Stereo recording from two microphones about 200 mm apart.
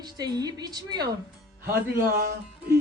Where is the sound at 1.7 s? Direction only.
50° right (ahead or behind).